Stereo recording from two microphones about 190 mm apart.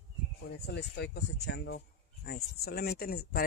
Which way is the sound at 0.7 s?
65° left (ahead or behind).